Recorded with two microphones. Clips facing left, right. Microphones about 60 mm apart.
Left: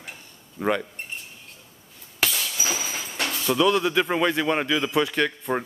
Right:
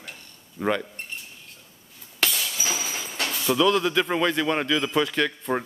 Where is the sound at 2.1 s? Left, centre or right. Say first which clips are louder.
Even; centre.